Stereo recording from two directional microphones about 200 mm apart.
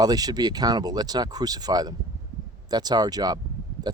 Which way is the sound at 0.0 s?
20° right (ahead or behind).